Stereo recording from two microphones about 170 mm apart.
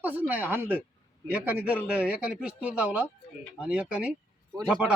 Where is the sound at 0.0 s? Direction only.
10° right (ahead or behind).